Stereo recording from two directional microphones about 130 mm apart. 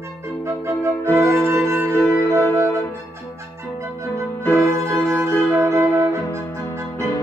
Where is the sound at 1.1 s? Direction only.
20° right (ahead or behind).